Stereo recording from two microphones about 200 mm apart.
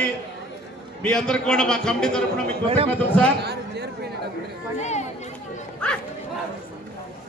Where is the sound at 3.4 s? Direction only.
55° right (ahead or behind).